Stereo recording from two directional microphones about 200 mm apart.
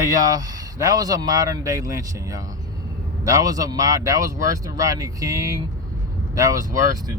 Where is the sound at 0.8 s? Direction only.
20° right (ahead or behind).